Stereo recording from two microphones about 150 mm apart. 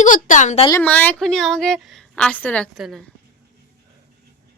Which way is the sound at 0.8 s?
10° left (ahead or behind).